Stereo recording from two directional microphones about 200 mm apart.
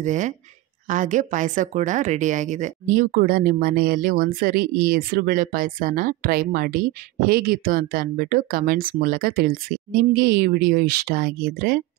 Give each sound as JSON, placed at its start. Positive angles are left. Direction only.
{"t": 0.0, "sound": "speech", "side_deg": -40}